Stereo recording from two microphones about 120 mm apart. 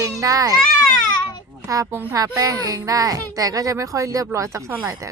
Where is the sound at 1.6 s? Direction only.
30° right (ahead or behind).